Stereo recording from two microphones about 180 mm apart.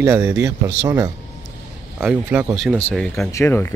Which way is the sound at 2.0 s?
10° right (ahead or behind).